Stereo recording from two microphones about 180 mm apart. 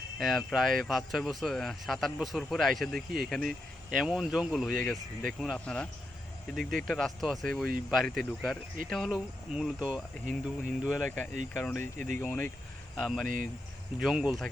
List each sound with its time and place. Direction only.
0.2 s speech: centre (ahead or behind)
6.6 s speech: 50° right (ahead or behind)
6.8 s speech: centre (ahead or behind)
13.2 s speech: 50° right (ahead or behind)
14.0 s speech: 5° right (ahead or behind)